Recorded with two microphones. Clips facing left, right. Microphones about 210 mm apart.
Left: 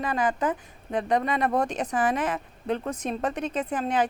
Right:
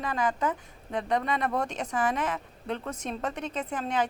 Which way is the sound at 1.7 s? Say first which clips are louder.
Left 3 dB; 15° left (ahead or behind).